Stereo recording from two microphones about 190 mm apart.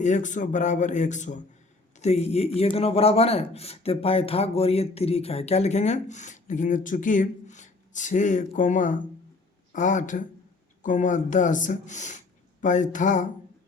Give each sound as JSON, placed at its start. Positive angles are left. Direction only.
{"t": 0.0, "sound": "a man's voice", "side_deg": 40}